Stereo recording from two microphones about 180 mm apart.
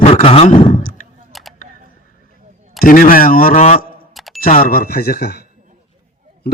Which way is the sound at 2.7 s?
50° left (ahead or behind).